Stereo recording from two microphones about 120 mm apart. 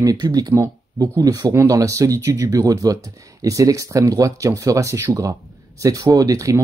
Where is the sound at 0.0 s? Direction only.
30° right (ahead or behind).